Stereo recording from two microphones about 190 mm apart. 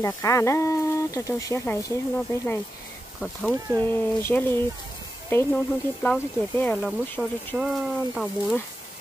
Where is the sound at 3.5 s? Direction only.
15° right (ahead or behind).